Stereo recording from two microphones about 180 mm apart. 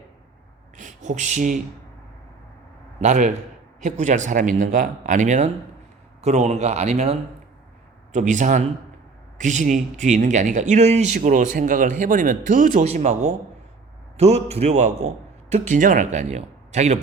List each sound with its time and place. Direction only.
0.8 s speech: 45° right (ahead or behind)
3.0 s a man's voice: 40° right (ahead or behind)